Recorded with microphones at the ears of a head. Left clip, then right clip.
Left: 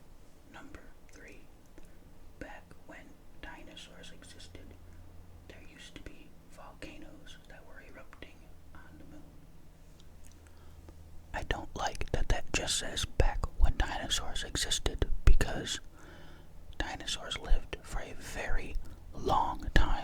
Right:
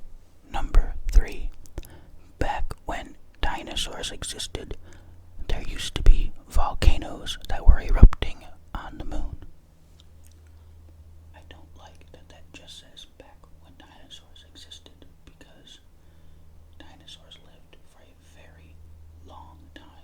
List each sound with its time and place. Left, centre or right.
0.4 s whispering: right
11.3 s whispering: left
16.7 s speech: left